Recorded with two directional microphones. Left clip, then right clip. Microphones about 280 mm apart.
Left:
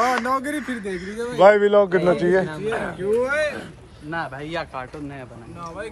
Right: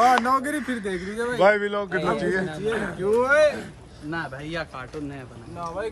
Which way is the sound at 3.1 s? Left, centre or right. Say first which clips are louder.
Right 3 dB; right.